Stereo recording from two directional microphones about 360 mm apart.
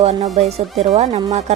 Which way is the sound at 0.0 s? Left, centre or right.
Centre.